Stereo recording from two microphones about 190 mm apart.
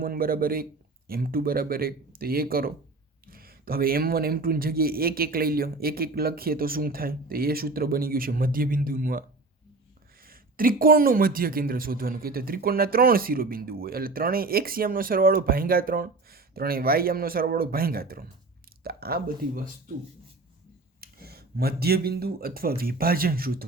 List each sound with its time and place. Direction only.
0.0 s speech: 50° right (ahead or behind)
21.0 s speech: 55° right (ahead or behind)